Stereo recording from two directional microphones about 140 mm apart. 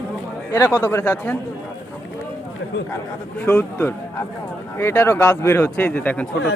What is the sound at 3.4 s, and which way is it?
Speech, 15° left (ahead or behind).